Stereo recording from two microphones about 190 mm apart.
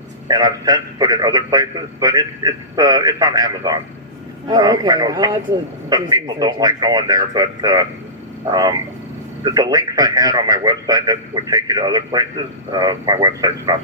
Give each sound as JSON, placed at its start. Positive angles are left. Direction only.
{"t": 0.3, "sound": "a man's voice", "side_deg": -20}